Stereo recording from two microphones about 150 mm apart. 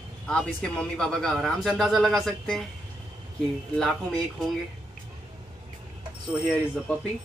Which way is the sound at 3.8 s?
Centre (ahead or behind).